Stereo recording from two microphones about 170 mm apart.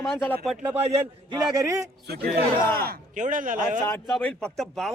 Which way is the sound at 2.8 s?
55° right (ahead or behind).